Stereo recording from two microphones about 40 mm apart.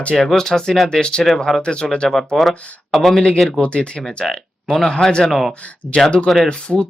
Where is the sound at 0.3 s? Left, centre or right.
Centre.